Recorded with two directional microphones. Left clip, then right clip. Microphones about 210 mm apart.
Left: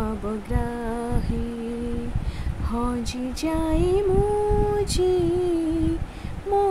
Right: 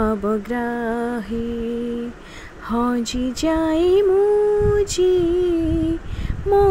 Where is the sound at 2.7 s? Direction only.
20° right (ahead or behind).